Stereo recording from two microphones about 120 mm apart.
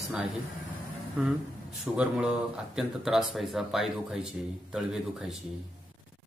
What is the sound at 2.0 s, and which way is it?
Speech, 10° right (ahead or behind).